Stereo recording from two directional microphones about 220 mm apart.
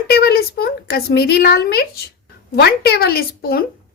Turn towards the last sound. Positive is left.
turn(degrees=45)  # may be behind; listen again after turning